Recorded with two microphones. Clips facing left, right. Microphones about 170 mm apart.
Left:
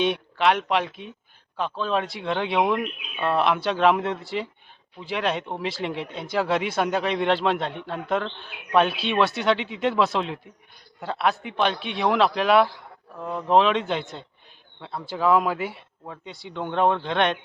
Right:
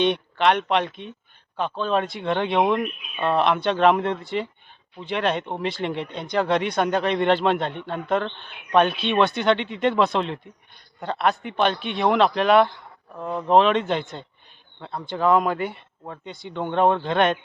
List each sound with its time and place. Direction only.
0.0 s speech: 5° left (ahead or behind)